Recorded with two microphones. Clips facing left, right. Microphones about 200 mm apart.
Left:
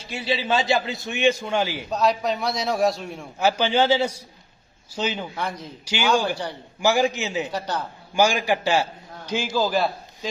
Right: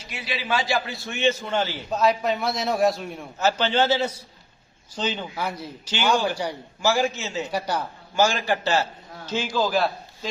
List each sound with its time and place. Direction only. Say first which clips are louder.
0.0 s a man's voice: left 6 dB; 25° left (ahead or behind)
1.9 s a man's voice: right 2 dB; centre (ahead or behind)
3.4 s a man's voice: left 1 dB; 10° left (ahead or behind)
5.4 s a man's voice: even; 10° right (ahead or behind)
5.8 s a man's voice: left 2 dB; 10° left (ahead or behind)
6.3 s a man's voice: right 2 dB; 10° right (ahead or behind)
6.8 s a man's voice: left 2 dB; 15° left (ahead or behind)
7.5 s a man's voice: right 1 dB; 10° right (ahead or behind)
8.1 s a man's voice: left 2 dB; 15° left (ahead or behind)